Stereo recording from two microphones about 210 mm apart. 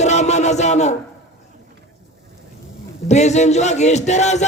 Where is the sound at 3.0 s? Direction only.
35° left (ahead or behind).